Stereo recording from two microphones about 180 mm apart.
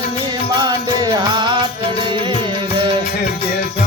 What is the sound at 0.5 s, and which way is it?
Music, 20° right (ahead or behind).